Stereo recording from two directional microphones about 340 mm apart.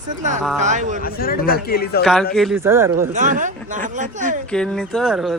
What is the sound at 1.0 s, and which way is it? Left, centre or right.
A man's voice, left.